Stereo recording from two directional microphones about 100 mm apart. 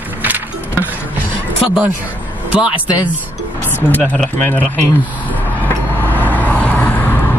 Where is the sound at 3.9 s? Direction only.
15° left (ahead or behind).